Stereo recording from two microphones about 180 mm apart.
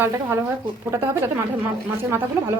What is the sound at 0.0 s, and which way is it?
Speech, 10° right (ahead or behind).